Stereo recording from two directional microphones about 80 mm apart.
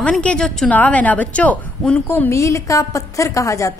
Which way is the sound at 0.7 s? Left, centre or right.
Centre.